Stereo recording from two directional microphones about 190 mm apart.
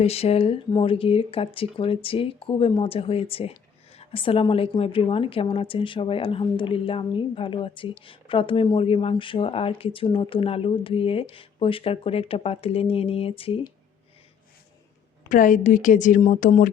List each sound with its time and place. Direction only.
0.0 s speech: 35° left (ahead or behind)
15.3 s speech: 45° left (ahead or behind)